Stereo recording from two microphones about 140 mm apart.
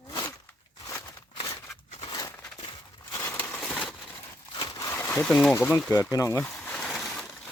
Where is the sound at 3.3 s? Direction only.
10° left (ahead or behind).